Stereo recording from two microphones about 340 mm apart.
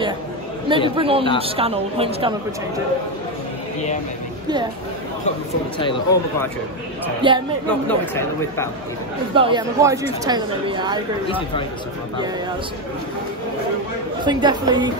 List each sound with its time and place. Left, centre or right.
0.7 s speech: centre
6.1 s speech: centre
7.2 s speech: centre
7.6 s speech: centre
9.3 s speech: centre
11.2 s speech: centre
14.2 s speech: centre